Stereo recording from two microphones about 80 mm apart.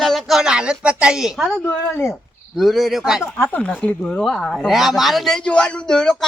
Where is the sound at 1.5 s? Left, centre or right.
Centre.